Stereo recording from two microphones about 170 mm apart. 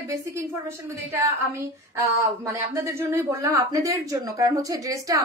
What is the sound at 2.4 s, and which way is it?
Speech, 15° right (ahead or behind).